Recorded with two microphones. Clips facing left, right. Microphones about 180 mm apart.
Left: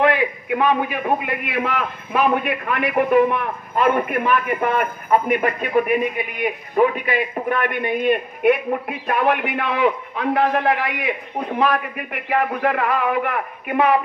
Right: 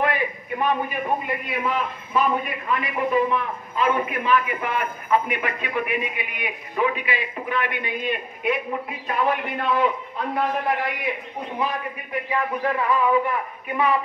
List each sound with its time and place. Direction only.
0.0 s a man's voice: 85° left; by 13.9 s 70° left (ahead or behind)